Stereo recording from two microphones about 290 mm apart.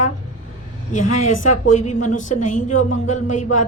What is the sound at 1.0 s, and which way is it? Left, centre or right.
Speech, left.